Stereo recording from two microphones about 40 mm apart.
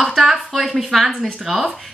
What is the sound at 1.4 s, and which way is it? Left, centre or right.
Speech, centre.